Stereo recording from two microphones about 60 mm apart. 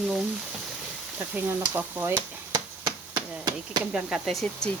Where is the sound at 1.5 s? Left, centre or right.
Right.